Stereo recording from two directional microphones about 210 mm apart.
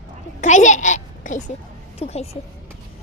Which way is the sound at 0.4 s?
35° left (ahead or behind).